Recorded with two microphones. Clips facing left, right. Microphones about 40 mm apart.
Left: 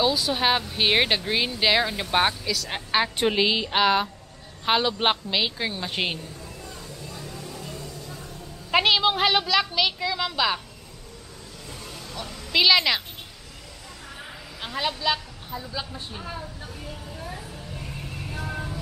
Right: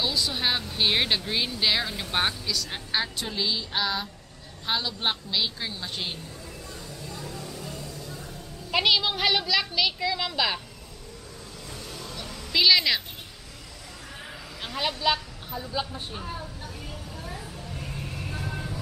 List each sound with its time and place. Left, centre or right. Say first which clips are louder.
0.0 s speech: left 5 dB; centre
2.7 s a woman's voice: left 7 dB; left
3.3 s a woman's voice: left 4 dB; left
7.1 s vehicle: right 1 dB; centre
8.7 s speech: left 3 dB; centre
11.9 s a sound: left 2 dB; centre
14.6 s a woman's voice: left 1 dB; centre
17.3 s vehicle: left 1 dB; centre